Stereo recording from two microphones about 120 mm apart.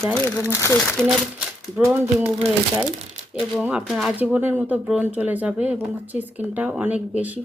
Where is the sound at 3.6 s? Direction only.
10° right (ahead or behind).